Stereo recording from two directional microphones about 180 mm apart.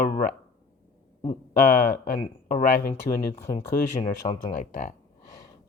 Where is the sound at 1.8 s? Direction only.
50° left (ahead or behind).